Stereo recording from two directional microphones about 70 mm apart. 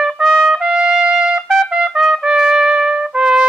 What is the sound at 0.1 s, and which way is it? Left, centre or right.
Trumpet, centre.